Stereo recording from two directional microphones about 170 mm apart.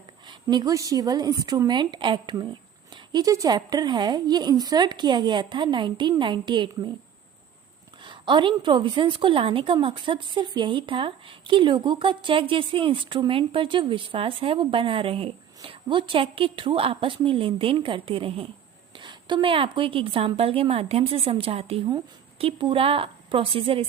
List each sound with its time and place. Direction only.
0.4 s a woman's voice: 20° right (ahead or behind)
8.0 s a woman's voice: 30° right (ahead or behind)